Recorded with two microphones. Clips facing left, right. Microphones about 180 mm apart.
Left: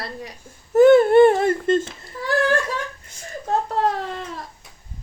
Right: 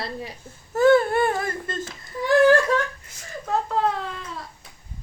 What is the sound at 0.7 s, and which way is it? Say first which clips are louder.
Speech: left 6 dB; 20° left (ahead or behind).